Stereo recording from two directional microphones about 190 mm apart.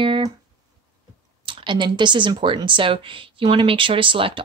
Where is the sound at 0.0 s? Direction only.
25° right (ahead or behind).